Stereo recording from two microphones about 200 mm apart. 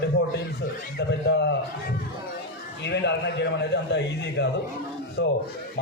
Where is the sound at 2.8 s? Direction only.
60° left (ahead or behind).